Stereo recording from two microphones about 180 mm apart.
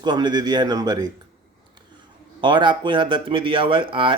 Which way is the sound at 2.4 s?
25° right (ahead or behind).